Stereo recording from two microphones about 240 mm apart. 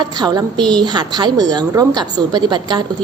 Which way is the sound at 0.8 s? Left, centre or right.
Centre.